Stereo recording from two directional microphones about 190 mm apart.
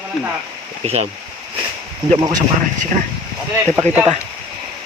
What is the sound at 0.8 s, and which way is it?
Speech, 35° right (ahead or behind).